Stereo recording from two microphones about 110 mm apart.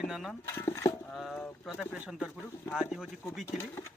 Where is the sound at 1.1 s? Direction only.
10° left (ahead or behind).